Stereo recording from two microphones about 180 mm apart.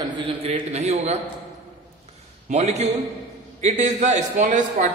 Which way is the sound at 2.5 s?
40° right (ahead or behind).